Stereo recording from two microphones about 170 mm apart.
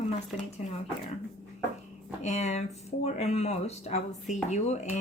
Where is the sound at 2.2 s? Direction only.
40° left (ahead or behind).